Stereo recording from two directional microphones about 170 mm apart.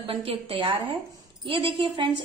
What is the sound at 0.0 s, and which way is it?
A woman's voice, 35° right (ahead or behind).